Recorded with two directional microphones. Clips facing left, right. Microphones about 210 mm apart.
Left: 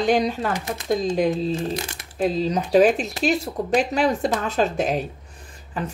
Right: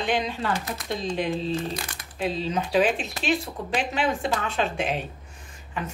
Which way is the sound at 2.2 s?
40° left (ahead or behind).